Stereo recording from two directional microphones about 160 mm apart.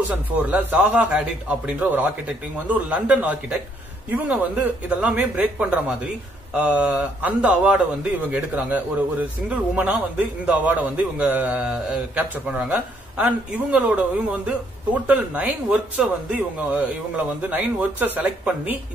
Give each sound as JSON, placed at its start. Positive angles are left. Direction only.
{"t": 0.4, "sound": "a man's voice", "side_deg": -10}